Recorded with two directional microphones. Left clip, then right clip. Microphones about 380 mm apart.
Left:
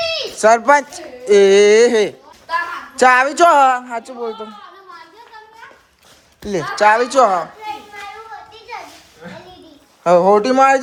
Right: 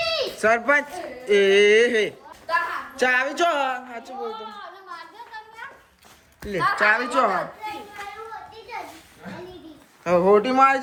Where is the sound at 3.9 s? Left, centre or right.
Centre.